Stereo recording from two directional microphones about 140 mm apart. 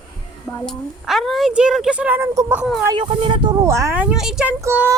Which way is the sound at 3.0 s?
35° right (ahead or behind).